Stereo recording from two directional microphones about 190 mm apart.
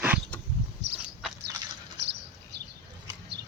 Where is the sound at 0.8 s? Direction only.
65° right (ahead or behind).